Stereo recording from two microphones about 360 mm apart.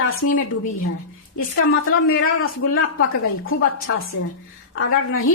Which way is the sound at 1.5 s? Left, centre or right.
Left.